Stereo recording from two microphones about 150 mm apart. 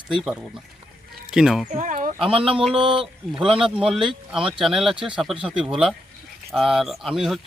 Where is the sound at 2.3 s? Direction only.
35° right (ahead or behind).